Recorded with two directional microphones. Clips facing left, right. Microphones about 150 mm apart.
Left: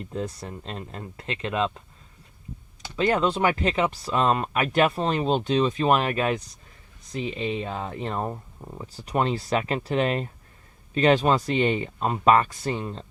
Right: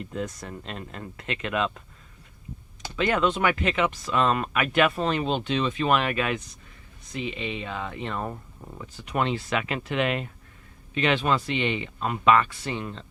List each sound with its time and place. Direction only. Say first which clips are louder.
0.1 s speech: left 3 dB; 30° left (ahead or behind)
2.9 s speech: left 1 dB; 35° left (ahead or behind)